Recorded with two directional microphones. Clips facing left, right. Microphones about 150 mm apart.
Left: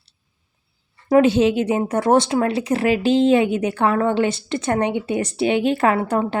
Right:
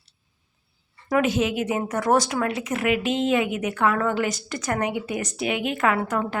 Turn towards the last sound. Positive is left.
turn(degrees=25)  # may be behind; listen again after turning